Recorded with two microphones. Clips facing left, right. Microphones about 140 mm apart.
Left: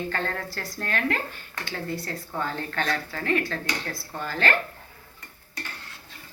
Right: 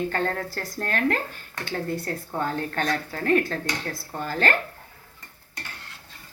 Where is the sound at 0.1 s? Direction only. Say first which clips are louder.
Right 3 dB; 45° right (ahead or behind).